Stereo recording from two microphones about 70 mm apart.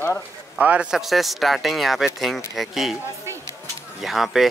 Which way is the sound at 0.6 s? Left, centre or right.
Centre.